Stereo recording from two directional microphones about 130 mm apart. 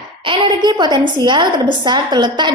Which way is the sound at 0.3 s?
35° right (ahead or behind).